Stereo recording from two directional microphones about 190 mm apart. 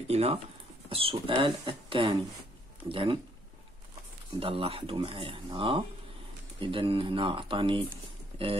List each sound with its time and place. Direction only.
0.1 s speech: 35° right (ahead or behind)
4.4 s speech: 30° right (ahead or behind)